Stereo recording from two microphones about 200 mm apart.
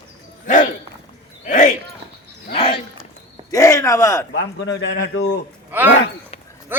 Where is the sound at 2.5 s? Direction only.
30° left (ahead or behind).